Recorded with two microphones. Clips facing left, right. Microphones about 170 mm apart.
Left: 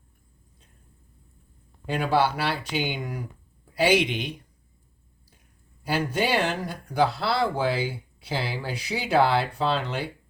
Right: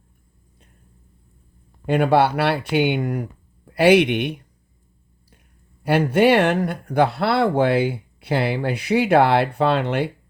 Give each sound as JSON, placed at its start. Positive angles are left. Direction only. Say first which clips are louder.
{"t": 1.9, "sound": "speech", "louder": "right 6 dB", "side_deg": -60}
{"t": 5.8, "sound": "speech", "louder": "right 9 dB", "side_deg": -60}